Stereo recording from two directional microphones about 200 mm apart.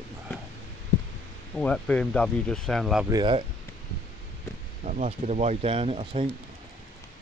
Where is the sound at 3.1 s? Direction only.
25° right (ahead or behind).